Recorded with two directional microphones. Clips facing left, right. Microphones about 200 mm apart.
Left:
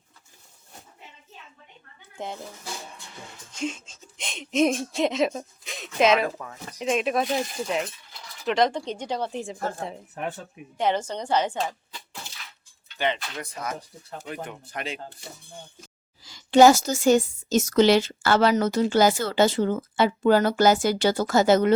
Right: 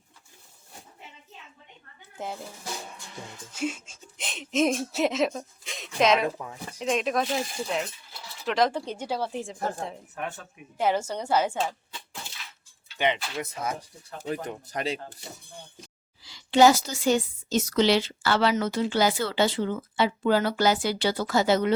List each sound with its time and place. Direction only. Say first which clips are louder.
2.1 s speech: left 1 dB; 5° right (ahead or behind)
3.5 s speech: even; 10° right (ahead or behind)
10.2 s speech: left 3 dB; 35° left (ahead or behind)
10.8 s a woman's voice: left 1 dB; 5° right (ahead or behind)
14.4 s speech: right 3 dB; 40° right (ahead or behind)
16.2 s a woman's voice: left 3 dB; 45° left (ahead or behind)